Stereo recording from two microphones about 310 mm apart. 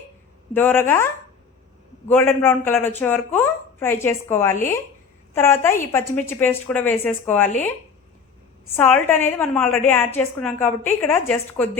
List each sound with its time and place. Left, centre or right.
0.5 s a woman's voice: centre
8.7 s a woman's voice: centre